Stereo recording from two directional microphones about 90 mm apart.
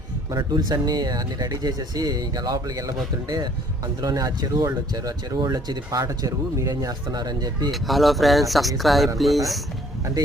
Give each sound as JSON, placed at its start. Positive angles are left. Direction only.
{"t": 0.3, "sound": "speech", "side_deg": -50}
{"t": 7.7, "sound": "speech", "side_deg": 0}